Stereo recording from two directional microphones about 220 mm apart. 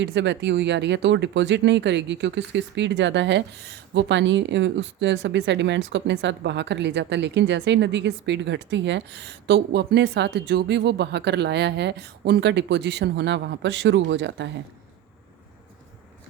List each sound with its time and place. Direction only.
0.0 s speech: 55° right (ahead or behind)